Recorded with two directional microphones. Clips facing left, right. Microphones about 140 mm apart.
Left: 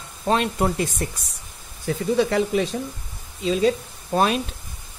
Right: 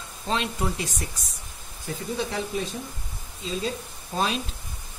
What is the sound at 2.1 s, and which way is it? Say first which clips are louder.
Speech: left 9 dB; 80° left.